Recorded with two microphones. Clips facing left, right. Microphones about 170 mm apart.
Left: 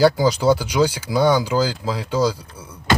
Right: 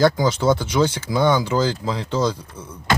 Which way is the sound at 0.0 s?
10° left (ahead or behind).